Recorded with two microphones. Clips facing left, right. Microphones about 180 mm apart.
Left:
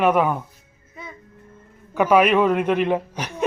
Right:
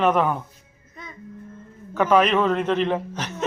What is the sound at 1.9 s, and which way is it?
A man's voice, 10° left (ahead or behind).